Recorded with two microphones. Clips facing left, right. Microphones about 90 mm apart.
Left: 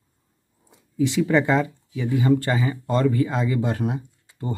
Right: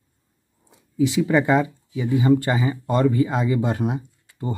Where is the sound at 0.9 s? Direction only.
5° right (ahead or behind).